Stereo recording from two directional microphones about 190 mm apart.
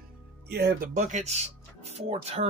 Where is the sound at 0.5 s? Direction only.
55° right (ahead or behind).